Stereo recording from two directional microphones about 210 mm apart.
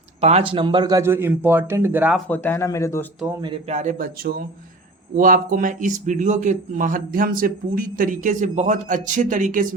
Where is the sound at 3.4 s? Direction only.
30° right (ahead or behind).